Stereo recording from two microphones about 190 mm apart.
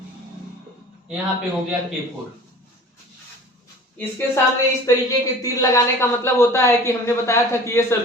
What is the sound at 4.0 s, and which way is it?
Speech, 10° left (ahead or behind).